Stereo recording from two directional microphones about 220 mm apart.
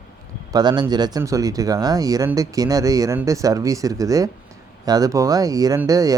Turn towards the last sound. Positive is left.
turn(degrees=-15)  # may be behind; listen again after turning